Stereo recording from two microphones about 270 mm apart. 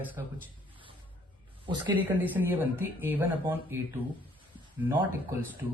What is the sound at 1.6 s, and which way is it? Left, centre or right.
Speech, centre.